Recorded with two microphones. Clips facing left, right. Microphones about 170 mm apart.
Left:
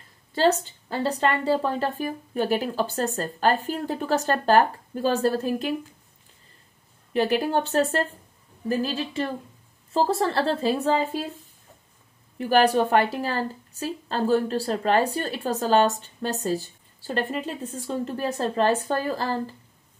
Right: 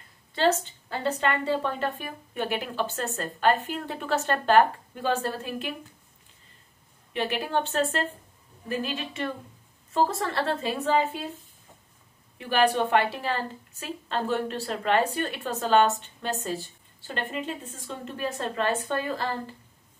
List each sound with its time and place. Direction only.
0.3 s a woman's voice: 35° left (ahead or behind)
7.2 s a woman's voice: 40° left (ahead or behind)
12.4 s a woman's voice: 40° left (ahead or behind)